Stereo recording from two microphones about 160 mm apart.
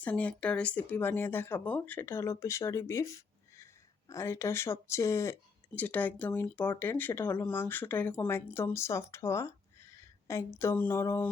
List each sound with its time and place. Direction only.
0.0 s speech: 10° left (ahead or behind)
9.9 s a sound: 15° left (ahead or behind)
10.6 s speech: 15° left (ahead or behind)